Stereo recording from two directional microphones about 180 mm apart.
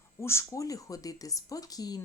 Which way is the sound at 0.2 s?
15° left (ahead or behind).